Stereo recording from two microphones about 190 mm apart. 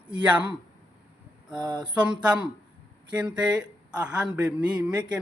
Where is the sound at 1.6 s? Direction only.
25° right (ahead or behind).